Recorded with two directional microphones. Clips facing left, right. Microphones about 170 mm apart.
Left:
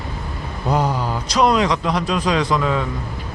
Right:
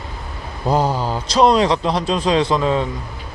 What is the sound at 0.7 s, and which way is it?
A man's voice, 30° right (ahead or behind).